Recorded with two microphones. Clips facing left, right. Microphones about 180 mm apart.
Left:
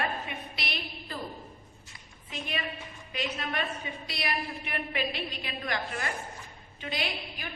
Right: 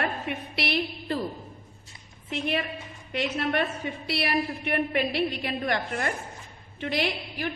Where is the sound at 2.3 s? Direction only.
65° right (ahead or behind).